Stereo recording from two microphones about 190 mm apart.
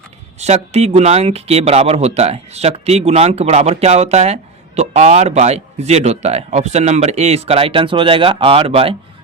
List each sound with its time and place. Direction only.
0.3 s speech: 35° right (ahead or behind)